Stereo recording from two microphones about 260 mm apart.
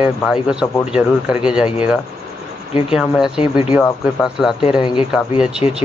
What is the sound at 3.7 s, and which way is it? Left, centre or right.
A man's voice, centre.